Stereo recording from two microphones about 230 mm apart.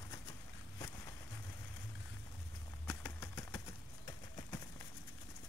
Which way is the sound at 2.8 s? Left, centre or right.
Centre.